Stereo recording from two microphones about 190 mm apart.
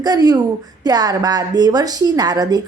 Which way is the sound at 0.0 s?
20° right (ahead or behind).